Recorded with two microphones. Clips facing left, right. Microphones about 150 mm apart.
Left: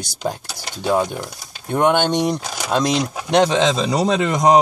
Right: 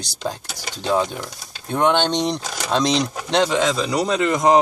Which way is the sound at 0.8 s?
10° left (ahead or behind).